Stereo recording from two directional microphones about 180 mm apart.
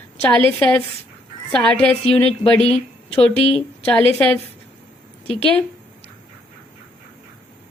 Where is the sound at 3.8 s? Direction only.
10° left (ahead or behind).